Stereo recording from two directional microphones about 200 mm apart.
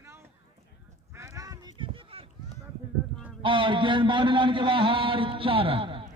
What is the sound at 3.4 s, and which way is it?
A man's voice, 25° right (ahead or behind).